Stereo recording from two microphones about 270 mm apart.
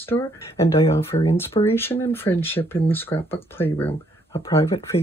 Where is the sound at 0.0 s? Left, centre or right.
Centre.